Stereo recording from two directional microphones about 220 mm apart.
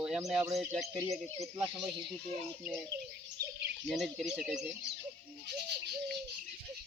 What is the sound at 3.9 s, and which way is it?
Speech, centre (ahead or behind).